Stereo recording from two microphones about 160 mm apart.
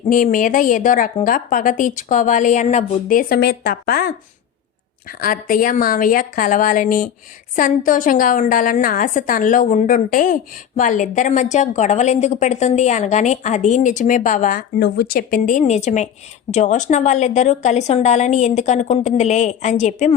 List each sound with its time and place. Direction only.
0.1 s a woman's voice: 55° left (ahead or behind)
14.8 s a woman's voice: 80° left; by 20.1 s 45° left (ahead or behind)